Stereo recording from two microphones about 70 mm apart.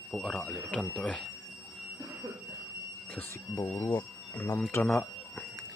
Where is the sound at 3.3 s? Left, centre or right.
Left.